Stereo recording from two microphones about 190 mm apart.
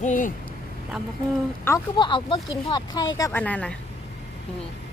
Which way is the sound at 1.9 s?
25° left (ahead or behind).